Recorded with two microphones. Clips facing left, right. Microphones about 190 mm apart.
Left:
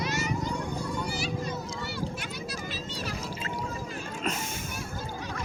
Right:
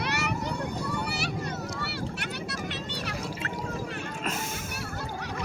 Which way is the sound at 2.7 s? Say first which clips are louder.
Right 1 dB; 65° right (ahead or behind).